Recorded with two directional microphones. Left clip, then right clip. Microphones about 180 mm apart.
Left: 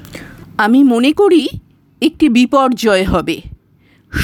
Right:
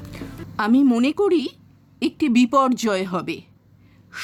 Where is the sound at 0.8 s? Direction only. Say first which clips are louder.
Left 8 dB; 35° left (ahead or behind).